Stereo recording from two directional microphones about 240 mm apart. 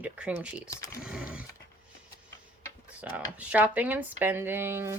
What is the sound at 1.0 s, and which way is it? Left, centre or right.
Wild animals, centre.